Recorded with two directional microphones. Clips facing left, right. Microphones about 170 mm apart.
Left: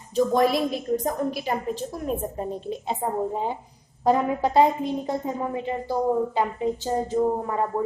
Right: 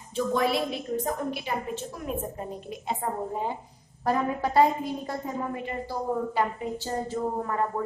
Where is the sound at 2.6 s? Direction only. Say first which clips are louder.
Left 4 dB; 25° left (ahead or behind).